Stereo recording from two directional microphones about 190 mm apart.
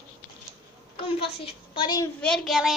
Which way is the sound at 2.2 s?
Centre (ahead or behind).